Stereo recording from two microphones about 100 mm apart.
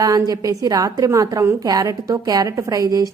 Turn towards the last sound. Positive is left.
turn(degrees=-35)  # may be behind; listen again after turning